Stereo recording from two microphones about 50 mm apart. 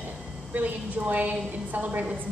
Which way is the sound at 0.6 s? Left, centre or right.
Right.